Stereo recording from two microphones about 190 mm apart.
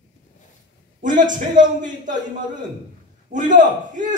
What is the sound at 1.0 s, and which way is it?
Speech, 40° right (ahead or behind).